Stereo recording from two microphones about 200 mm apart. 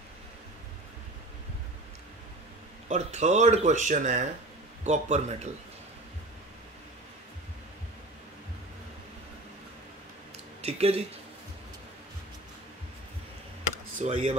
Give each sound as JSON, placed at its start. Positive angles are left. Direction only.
{"t": 2.9, "sound": "speech", "side_deg": -35}
{"t": 10.6, "sound": "speech", "side_deg": -30}
{"t": 13.9, "sound": "speech", "side_deg": -30}